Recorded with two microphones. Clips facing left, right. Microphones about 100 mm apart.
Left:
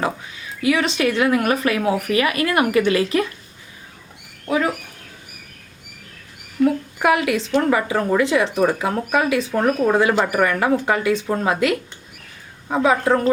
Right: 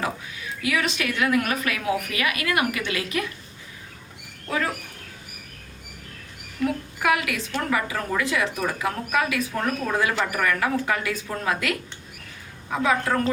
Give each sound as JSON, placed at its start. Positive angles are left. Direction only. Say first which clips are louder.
{"t": 0.6, "sound": "speech", "louder": "left 7 dB", "side_deg": 30}
{"t": 4.4, "sound": "speech", "louder": "left 6 dB", "side_deg": 15}
{"t": 7.0, "sound": "speech", "louder": "left 6 dB", "side_deg": 30}